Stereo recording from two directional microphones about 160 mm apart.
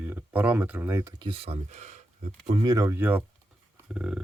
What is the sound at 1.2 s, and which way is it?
Speech, 35° right (ahead or behind).